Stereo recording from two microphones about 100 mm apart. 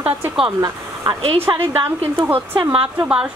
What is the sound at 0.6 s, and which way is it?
Speech, 40° right (ahead or behind).